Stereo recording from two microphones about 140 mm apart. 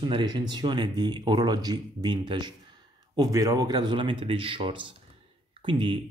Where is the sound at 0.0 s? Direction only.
30° right (ahead or behind).